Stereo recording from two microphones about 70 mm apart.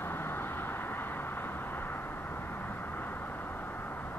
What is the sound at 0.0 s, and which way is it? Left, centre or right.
Vehicle, left.